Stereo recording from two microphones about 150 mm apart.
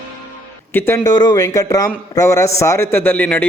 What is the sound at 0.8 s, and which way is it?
A man's voice, 15° left (ahead or behind).